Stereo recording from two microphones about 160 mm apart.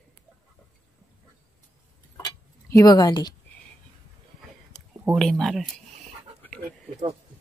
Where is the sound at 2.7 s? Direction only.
25° left (ahead or behind).